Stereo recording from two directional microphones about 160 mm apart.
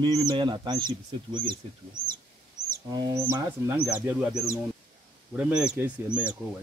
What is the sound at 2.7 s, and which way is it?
Bird, 25° right (ahead or behind).